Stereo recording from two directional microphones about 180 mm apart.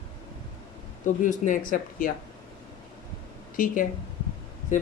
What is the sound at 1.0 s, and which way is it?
A man's voice, 45° left (ahead or behind).